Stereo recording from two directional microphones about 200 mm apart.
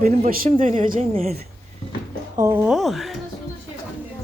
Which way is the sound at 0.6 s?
30° right (ahead or behind).